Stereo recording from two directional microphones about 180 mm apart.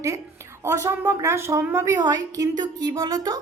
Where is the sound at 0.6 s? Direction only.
15° right (ahead or behind).